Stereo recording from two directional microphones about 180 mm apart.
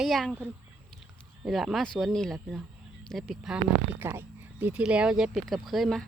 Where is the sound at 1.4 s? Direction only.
Centre (ahead or behind).